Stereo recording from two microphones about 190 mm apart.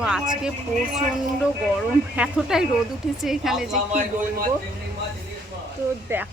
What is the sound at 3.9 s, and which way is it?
Speech, 40° right (ahead or behind).